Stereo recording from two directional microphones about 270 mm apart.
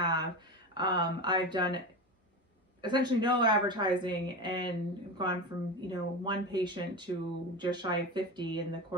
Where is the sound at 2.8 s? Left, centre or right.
Centre.